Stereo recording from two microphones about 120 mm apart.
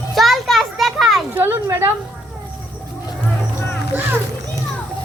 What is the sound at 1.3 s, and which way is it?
Speech, 20° right (ahead or behind).